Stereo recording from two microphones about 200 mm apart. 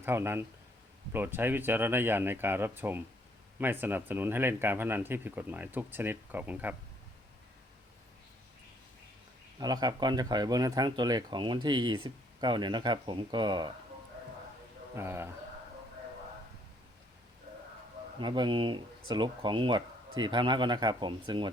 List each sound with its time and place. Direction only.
0.0 s speech: 10° right (ahead or behind)
9.6 s speech: 20° right (ahead or behind)
14.9 s speech: 10° right (ahead or behind)
18.2 s speech: 25° right (ahead or behind)